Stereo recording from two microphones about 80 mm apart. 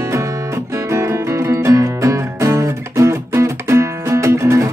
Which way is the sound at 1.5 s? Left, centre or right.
Right.